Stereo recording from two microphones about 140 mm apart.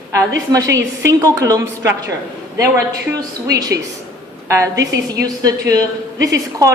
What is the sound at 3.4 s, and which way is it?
A woman's voice, 25° right (ahead or behind).